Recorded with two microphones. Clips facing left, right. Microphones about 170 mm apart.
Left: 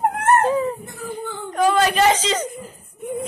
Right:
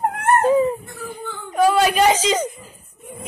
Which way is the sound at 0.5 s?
15° right (ahead or behind).